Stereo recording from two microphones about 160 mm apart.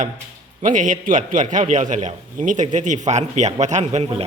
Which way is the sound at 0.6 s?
55° right (ahead or behind).